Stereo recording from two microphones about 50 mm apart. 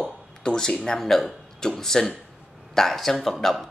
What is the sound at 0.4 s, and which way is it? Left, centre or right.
A man's voice, centre.